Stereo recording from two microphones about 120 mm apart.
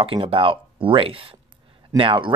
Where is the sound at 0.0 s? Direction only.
50° right (ahead or behind).